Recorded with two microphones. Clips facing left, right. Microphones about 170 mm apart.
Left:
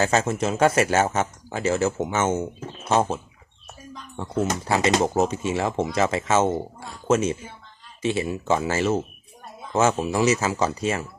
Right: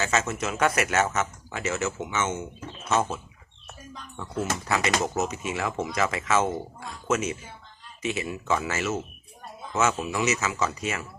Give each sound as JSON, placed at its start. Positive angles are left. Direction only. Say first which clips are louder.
{"t": 0.0, "sound": "speech", "louder": "left 5 dB", "side_deg": 35}
{"t": 4.2, "sound": "speech", "louder": "left 5 dB", "side_deg": 30}